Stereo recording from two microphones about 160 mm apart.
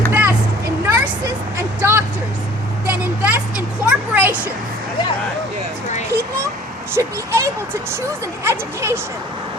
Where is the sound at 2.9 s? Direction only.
10° right (ahead or behind).